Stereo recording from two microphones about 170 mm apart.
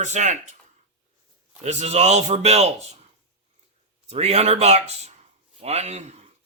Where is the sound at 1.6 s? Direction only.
40° right (ahead or behind).